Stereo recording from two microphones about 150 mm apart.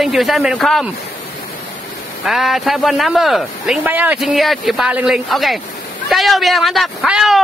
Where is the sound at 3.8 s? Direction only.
10° right (ahead or behind).